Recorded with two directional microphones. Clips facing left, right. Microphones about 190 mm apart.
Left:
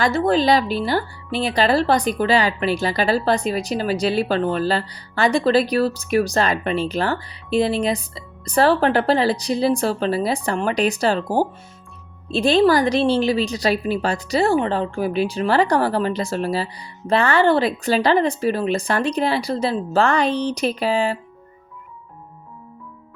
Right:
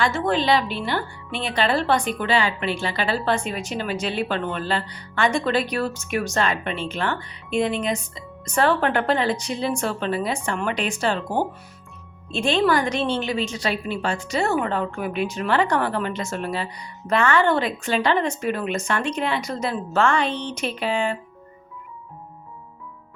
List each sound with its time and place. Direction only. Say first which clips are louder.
0.0 s speech: left 4 dB; 35° left (ahead or behind)